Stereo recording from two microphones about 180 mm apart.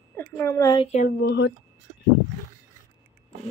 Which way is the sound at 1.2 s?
70° left (ahead or behind).